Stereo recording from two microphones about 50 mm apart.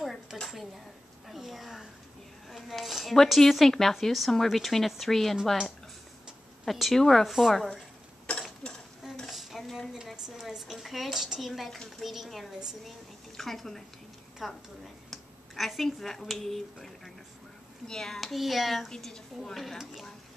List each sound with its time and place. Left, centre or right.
0.3 s dishes: centre
1.3 s speech: centre
6.6 s speech: centre
8.3 s a sound: centre
9.3 s a sound: centre
10.1 s a woman's voice: centre
18.2 s speech: centre
18.9 s a woman's voice: centre